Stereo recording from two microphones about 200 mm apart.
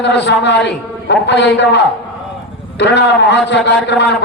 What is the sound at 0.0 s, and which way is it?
A man's voice, 60° left (ahead or behind).